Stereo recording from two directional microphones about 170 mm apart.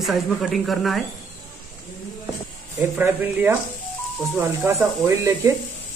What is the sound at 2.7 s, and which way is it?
Speech, 10° right (ahead or behind).